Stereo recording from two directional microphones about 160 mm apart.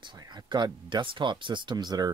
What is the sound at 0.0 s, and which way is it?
Speech, 30° right (ahead or behind).